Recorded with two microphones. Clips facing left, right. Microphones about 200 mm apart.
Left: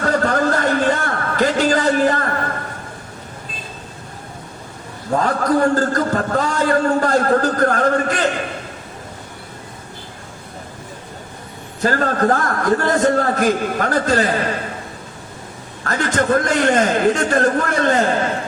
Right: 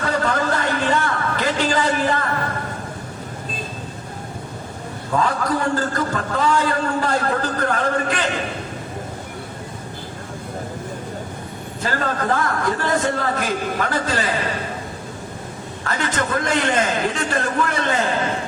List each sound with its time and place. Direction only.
0.0 s a sound: 45° left (ahead or behind)
5.1 s a man's voice: 45° left (ahead or behind)
11.8 s a man's voice: 45° left (ahead or behind)
15.9 s a man's voice: 45° left (ahead or behind)